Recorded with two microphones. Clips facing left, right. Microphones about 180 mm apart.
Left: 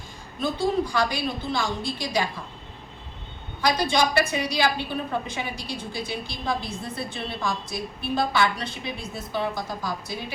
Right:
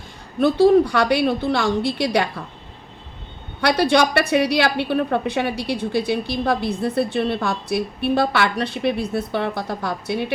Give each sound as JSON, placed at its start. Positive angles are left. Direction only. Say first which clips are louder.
{"t": 0.3, "sound": "a woman's voice", "louder": "right 11 dB", "side_deg": -65}
{"t": 3.6, "sound": "a woman's voice", "louder": "right 6 dB", "side_deg": -65}